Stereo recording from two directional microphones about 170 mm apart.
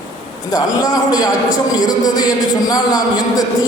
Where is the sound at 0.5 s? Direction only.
20° left (ahead or behind).